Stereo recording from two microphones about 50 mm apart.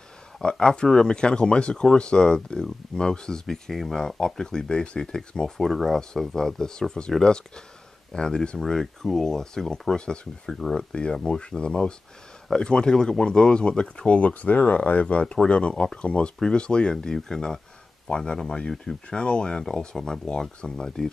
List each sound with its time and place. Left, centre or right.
0.4 s speech: centre
5.7 s speech: centre